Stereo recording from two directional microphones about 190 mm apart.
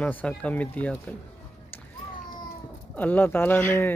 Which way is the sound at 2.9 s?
10° left (ahead or behind).